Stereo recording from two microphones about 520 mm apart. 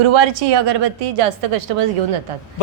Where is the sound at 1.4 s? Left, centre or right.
Right.